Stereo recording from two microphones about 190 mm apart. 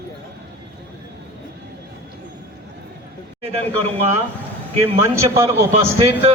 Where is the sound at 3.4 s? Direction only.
35° right (ahead or behind).